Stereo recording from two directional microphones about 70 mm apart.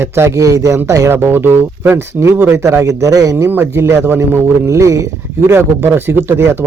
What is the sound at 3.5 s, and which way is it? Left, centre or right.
A man's voice, right.